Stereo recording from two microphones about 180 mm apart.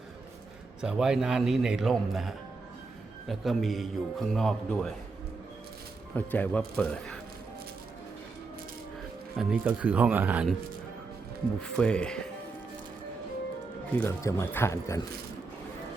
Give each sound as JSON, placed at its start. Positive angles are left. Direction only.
{"t": 0.8, "sound": "a man's voice", "side_deg": -5}
{"t": 6.1, "sound": "a man's voice", "side_deg": 10}
{"t": 9.4, "sound": "speech", "side_deg": -5}
{"t": 11.8, "sound": "a man's voice", "side_deg": 5}
{"t": 13.9, "sound": "speech", "side_deg": 15}